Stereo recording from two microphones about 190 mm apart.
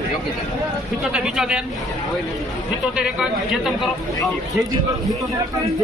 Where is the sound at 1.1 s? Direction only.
5° right (ahead or behind).